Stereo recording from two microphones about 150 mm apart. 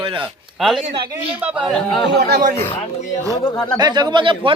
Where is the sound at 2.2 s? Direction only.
80° right.